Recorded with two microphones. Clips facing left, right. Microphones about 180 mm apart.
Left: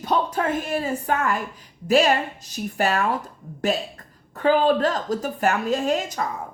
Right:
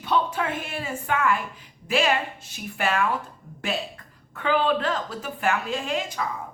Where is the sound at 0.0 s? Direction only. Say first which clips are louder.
Left 2 dB; 40° left (ahead or behind).